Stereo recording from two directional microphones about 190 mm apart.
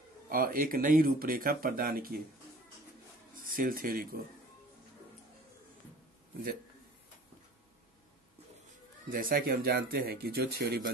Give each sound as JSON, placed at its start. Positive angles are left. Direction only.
{"t": 0.3, "sound": "speech", "side_deg": -50}
{"t": 3.3, "sound": "speech", "side_deg": -50}
{"t": 9.1, "sound": "speech", "side_deg": -50}